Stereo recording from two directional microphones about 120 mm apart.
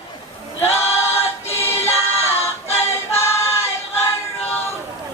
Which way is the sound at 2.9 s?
20° left (ahead or behind).